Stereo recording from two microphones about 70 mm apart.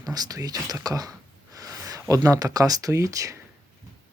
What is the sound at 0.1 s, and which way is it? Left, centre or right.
Speech, right.